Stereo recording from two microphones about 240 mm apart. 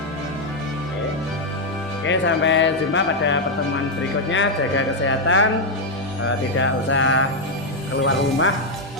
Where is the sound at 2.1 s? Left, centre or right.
Left.